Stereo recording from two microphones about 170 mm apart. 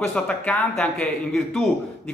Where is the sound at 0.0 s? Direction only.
5° left (ahead or behind).